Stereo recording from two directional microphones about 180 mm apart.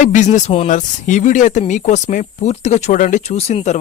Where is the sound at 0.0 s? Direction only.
40° left (ahead or behind).